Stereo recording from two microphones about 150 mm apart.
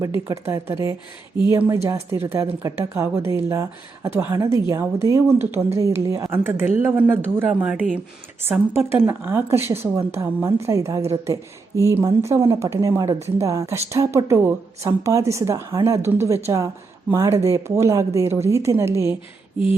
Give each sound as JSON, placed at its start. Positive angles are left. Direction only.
{"t": 0.0, "sound": "speech", "side_deg": -15}